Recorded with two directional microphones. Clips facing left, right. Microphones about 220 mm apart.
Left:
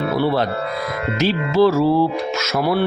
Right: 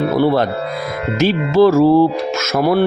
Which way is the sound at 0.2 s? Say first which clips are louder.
Right 4 dB; 45° right (ahead or behind).